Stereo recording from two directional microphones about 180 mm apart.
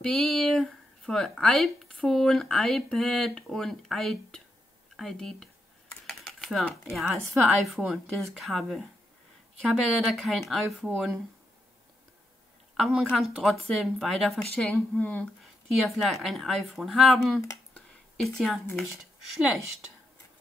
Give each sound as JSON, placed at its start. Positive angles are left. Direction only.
{"t": 0.0, "sound": "speech", "side_deg": 0}
{"t": 12.7, "sound": "speech", "side_deg": 0}
{"t": 18.2, "sound": "speech", "side_deg": 0}